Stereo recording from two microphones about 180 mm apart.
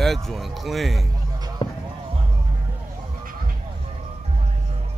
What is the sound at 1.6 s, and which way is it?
Music, 25° left (ahead or behind).